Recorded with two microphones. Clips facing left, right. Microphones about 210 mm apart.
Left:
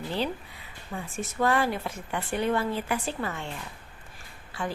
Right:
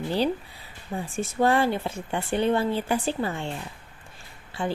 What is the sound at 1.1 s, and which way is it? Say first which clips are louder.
Speech: right 3 dB; 30° right (ahead or behind).